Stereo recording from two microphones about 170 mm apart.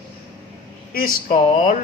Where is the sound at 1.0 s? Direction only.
55° left (ahead or behind).